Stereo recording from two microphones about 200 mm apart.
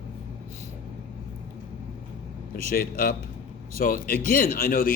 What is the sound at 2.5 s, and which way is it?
Speech, 45° left (ahead or behind).